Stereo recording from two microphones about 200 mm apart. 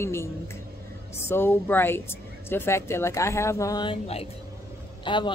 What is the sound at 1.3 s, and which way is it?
A woman's voice, 10° left (ahead or behind).